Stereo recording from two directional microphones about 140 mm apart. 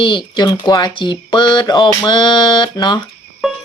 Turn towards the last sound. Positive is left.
turn(degrees=0)  # may be behind; listen again after turning